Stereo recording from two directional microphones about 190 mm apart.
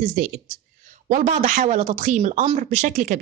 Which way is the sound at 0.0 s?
45° right (ahead or behind).